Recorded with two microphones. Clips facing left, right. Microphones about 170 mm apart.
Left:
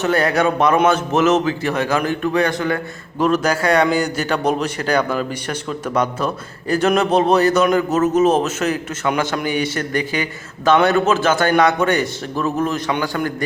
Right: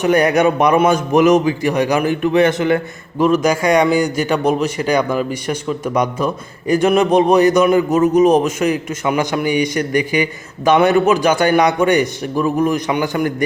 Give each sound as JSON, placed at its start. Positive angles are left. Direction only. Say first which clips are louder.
{"t": 0.0, "sound": "a man's voice", "louder": "right 4 dB", "side_deg": -15}
{"t": 3.2, "sound": "a man's voice", "louder": "right 3 dB", "side_deg": -10}